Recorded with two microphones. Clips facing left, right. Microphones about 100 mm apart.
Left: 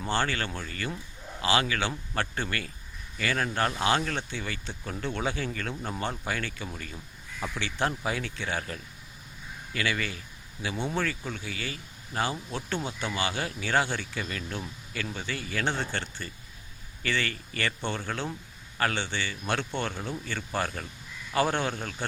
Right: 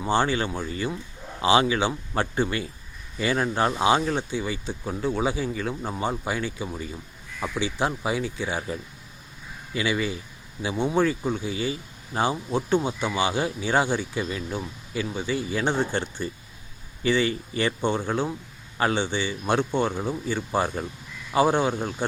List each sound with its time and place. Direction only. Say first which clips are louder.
0.0 s speech: right 6 dB; 15° right (ahead or behind)